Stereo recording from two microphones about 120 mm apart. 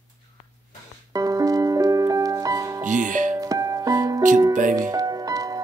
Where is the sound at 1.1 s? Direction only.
30° right (ahead or behind).